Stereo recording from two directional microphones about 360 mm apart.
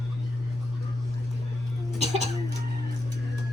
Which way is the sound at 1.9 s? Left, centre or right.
Centre.